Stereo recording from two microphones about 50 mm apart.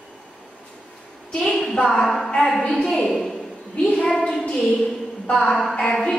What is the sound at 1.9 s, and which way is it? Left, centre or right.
A woman's voice, centre.